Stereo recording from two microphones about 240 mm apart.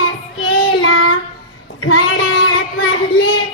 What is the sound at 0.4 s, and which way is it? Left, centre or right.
Child singing, left.